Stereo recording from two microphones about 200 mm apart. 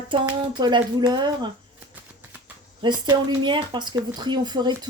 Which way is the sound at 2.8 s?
20° right (ahead or behind).